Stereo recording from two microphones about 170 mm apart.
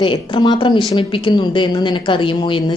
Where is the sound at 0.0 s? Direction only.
30° left (ahead or behind).